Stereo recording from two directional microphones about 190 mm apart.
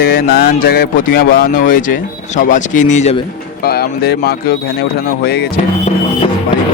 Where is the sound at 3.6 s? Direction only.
55° left (ahead or behind).